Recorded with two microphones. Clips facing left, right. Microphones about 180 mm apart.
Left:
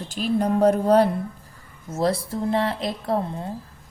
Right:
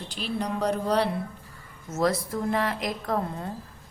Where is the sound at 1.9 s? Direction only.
30° left (ahead or behind).